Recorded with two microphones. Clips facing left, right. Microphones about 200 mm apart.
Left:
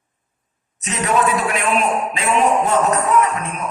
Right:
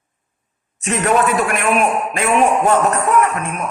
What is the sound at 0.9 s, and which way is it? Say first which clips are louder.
A man's voice: right 3 dB; 55° right (ahead or behind).